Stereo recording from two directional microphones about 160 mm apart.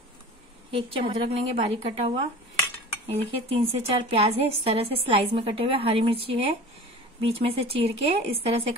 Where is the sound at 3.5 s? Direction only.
35° right (ahead or behind).